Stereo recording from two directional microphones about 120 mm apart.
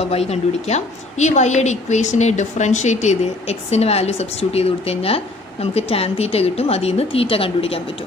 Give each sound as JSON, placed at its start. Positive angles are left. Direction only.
{"t": 0.0, "sound": "a woman's voice", "side_deg": 60}